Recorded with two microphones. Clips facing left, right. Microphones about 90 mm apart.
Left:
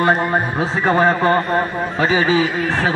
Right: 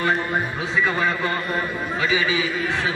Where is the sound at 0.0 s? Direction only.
40° left (ahead or behind).